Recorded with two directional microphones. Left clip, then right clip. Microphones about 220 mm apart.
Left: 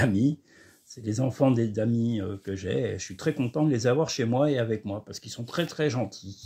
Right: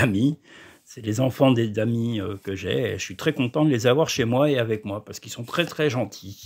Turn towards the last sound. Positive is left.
turn(degrees=-25)  # may be behind; listen again after turning